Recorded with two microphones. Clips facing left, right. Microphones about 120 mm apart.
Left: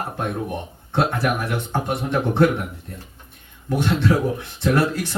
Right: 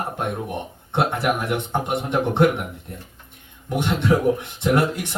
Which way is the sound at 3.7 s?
20° right (ahead or behind).